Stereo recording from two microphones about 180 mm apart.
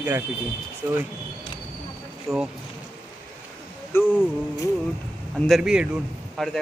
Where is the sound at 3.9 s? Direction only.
15° left (ahead or behind).